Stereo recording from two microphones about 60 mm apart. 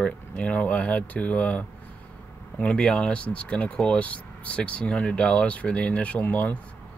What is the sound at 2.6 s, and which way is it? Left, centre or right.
Speech, centre.